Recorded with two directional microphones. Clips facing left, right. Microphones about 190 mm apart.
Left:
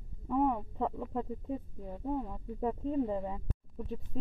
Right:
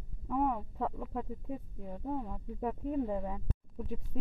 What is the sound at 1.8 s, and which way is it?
Speech, 5° left (ahead or behind).